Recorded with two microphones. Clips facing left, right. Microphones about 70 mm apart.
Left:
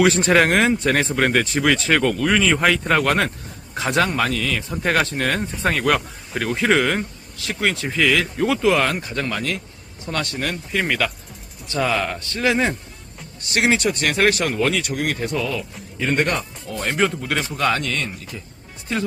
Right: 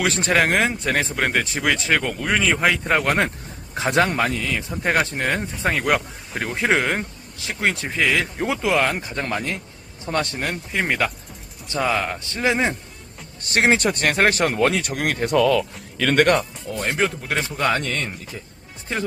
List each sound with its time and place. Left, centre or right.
0.0 s speech: centre
2.1 s speech: centre
11.8 s speech: centre
12.2 s speech: right
13.4 s speech: right
16.7 s speech: centre
17.6 s speech: right